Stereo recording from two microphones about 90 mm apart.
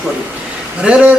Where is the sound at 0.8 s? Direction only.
15° right (ahead or behind).